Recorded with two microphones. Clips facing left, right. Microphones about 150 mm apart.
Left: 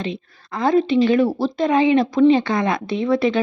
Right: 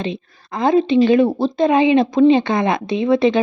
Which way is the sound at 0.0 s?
20° right (ahead or behind).